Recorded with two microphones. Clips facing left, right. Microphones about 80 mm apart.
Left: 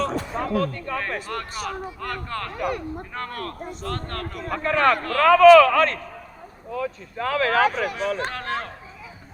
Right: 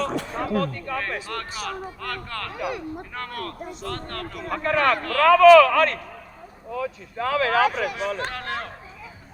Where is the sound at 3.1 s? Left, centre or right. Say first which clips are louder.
Left 2 dB; left.